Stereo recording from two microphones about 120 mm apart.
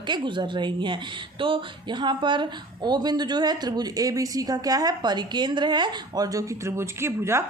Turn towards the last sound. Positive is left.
turn(degrees=-20)  # may be behind; listen again after turning